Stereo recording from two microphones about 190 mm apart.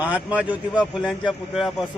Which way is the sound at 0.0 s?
10° right (ahead or behind).